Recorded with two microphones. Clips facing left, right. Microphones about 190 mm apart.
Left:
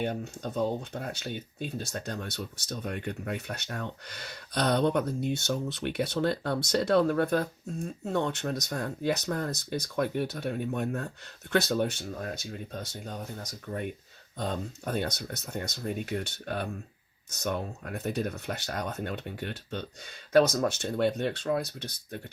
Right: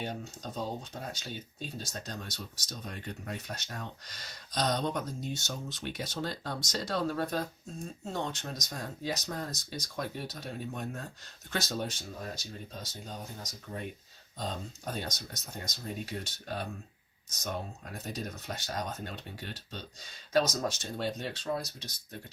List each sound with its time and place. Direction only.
0.0 s speech: 60° left (ahead or behind)